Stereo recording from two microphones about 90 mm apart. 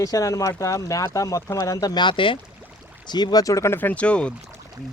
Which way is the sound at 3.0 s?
50° left (ahead or behind).